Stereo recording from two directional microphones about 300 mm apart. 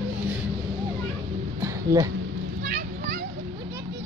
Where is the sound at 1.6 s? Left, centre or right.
Centre.